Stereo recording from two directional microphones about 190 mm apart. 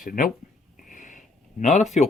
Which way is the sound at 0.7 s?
45° left (ahead or behind).